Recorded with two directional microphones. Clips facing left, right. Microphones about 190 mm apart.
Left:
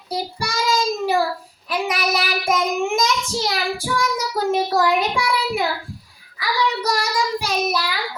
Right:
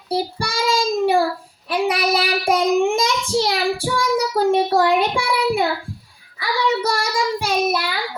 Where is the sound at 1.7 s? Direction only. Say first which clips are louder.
Right 3 dB; 30° right (ahead or behind).